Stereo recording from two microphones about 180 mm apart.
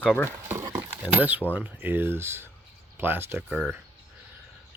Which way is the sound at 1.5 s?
10° right (ahead or behind).